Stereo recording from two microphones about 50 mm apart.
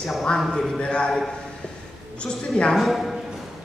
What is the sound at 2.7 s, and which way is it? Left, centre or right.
Speech, centre.